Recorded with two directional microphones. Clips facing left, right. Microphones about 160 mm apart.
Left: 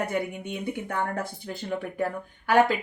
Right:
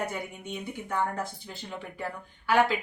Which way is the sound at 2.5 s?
50° left (ahead or behind).